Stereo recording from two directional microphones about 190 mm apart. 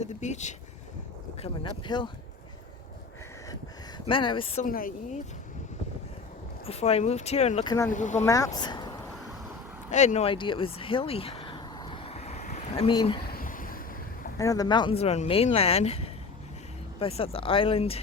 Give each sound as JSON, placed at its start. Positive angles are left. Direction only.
{"t": 0.0, "sound": "speech", "side_deg": 40}
{"t": 1.4, "sound": "speech", "side_deg": 25}
{"t": 3.5, "sound": "a sound", "side_deg": 25}
{"t": 4.6, "sound": "speech", "side_deg": 50}
{"t": 6.7, "sound": "speech", "side_deg": 35}
{"t": 7.6, "sound": "speech", "side_deg": 20}
{"t": 7.9, "sound": "speech", "side_deg": 40}
{"t": 8.2, "sound": "speech", "side_deg": 15}
{"t": 9.9, "sound": "a sound", "side_deg": 40}
{"t": 13.2, "sound": "a sound", "side_deg": 50}
{"t": 14.3, "sound": "speech", "side_deg": 15}